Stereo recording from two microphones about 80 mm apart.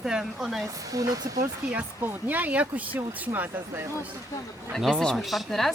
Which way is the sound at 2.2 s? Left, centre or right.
Right.